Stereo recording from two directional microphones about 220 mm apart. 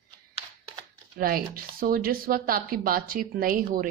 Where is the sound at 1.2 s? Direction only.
40° right (ahead or behind).